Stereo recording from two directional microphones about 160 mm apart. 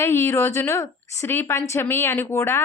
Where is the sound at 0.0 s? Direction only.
15° left (ahead or behind).